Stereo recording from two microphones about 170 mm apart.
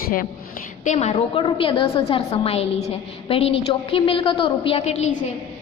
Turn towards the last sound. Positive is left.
turn(degrees=40)  # may be behind; listen again after turning